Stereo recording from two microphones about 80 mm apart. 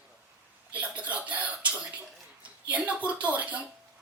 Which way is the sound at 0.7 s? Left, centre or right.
Centre.